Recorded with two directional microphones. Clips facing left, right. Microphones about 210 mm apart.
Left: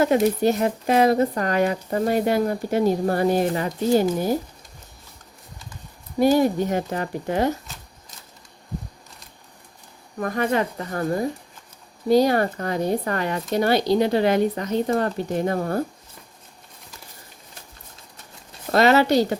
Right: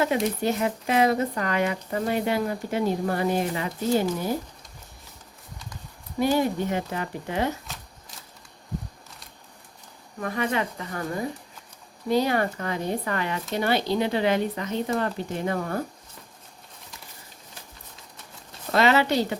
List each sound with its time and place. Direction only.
0.4 s speech: 40° left (ahead or behind)
6.1 s speech: 40° left (ahead or behind)
10.2 s speech: 45° left (ahead or behind)
18.7 s speech: 40° left (ahead or behind)